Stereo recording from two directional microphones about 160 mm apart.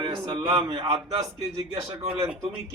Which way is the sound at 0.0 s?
25° right (ahead or behind).